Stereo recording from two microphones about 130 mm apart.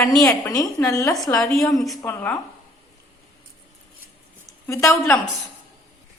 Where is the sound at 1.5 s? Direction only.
Centre (ahead or behind).